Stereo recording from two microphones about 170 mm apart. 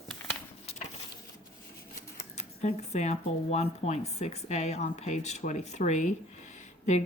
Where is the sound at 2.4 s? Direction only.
40° left (ahead or behind).